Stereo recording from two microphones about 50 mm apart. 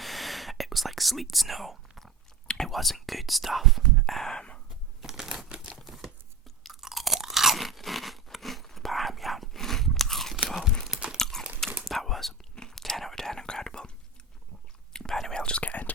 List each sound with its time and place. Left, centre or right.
0.0 s whispering: centre
5.0 s crumpling: centre
5.8 s crumpling: centre
6.6 s crunch: centre
10.3 s a sound: centre
10.8 s crunch: centre
11.2 s horse: centre
11.9 s whispering: centre
14.9 s whispering: centre; by 15.9 s left